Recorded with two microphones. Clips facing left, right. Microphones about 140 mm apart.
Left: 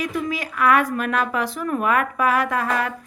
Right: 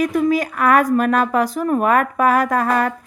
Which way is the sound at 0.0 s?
45° right (ahead or behind).